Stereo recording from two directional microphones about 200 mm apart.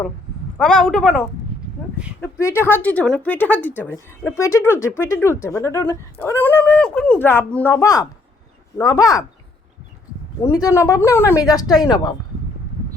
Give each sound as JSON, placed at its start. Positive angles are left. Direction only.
{"t": 0.5, "sound": "speech", "side_deg": 5}
{"t": 2.2, "sound": "speech", "side_deg": 15}
{"t": 10.4, "sound": "speech", "side_deg": 15}